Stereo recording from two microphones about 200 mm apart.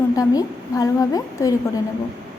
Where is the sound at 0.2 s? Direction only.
15° left (ahead or behind).